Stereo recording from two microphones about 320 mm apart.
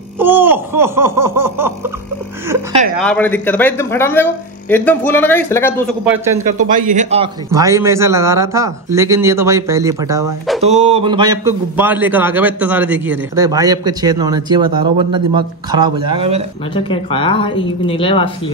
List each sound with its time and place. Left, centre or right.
0.2 s a sound: centre
3.0 s speech: centre
6.0 s a man's voice: centre
6.6 s a man's voice: right; by 10.6 s centre
10.6 s a man's voice: centre
16.7 s speech: centre